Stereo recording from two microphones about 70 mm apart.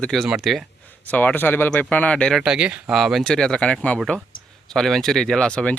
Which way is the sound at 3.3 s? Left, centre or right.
Centre.